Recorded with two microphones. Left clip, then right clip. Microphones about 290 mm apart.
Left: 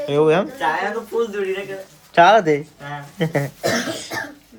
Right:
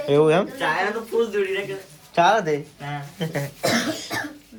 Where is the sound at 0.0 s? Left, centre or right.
Centre.